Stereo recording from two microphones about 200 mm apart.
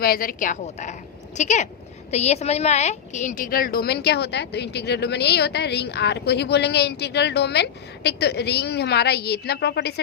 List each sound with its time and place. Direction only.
0.0 s a woman's voice: 45° left (ahead or behind)